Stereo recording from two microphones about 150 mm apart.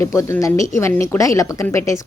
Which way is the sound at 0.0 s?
20° left (ahead or behind).